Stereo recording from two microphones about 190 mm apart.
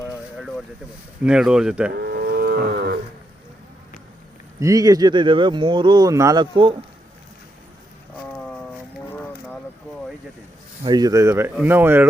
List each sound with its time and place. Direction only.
1.2 s speech: 5° right (ahead or behind)
1.9 s moo: 55° right (ahead or behind)
4.6 s speech: 20° right (ahead or behind)
8.1 s boat: 5° left (ahead or behind)
10.8 s speech: 20° right (ahead or behind)